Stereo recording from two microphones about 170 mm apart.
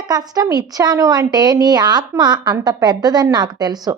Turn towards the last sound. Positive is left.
turn(degrees=-25)  # may be behind; listen again after turning